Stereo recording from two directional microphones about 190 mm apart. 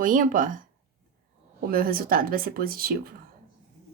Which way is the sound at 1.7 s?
50° right (ahead or behind).